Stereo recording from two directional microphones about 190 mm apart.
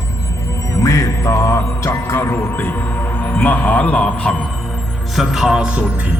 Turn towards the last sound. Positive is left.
turn(degrees=-5)  # may be behind; listen again after turning